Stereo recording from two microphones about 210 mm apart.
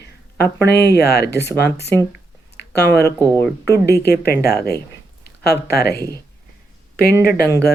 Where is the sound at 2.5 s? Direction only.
50° left (ahead or behind).